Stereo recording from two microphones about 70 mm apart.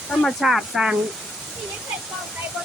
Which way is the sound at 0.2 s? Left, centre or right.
Centre.